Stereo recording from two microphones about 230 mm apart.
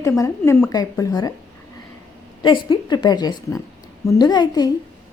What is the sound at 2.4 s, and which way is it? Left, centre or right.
A woman's voice, centre.